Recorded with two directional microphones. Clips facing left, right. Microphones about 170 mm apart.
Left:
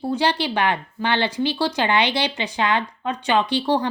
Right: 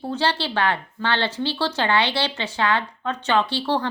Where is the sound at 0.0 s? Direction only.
15° left (ahead or behind).